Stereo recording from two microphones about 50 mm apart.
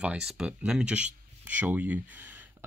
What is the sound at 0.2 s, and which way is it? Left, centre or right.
Speech, centre.